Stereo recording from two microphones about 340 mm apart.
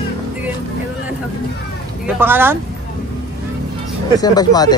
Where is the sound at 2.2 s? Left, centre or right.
Centre.